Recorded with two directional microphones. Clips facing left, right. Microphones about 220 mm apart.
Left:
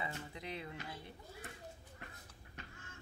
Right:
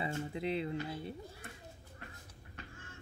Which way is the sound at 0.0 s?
25° right (ahead or behind).